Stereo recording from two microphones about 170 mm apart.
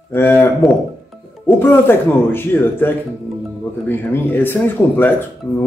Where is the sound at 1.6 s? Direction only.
10° left (ahead or behind).